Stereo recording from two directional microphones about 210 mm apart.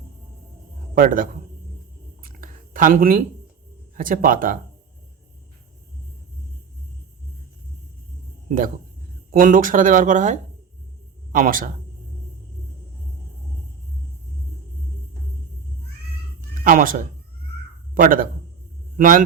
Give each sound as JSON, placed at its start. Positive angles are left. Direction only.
{"t": 0.9, "sound": "speech", "side_deg": -40}
{"t": 2.2, "sound": "a sound", "side_deg": -40}
{"t": 3.9, "sound": "speech", "side_deg": -40}
{"t": 8.4, "sound": "speech", "side_deg": -40}
{"t": 16.6, "sound": "speech", "side_deg": -40}